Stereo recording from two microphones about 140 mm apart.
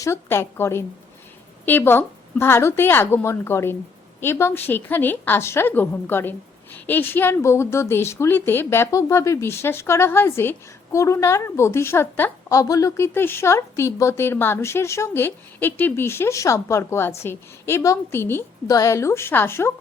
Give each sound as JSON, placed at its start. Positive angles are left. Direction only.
{"t": 0.0, "sound": "a woman's voice", "side_deg": 20}